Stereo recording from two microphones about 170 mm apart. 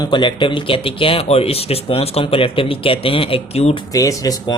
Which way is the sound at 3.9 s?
20° left (ahead or behind).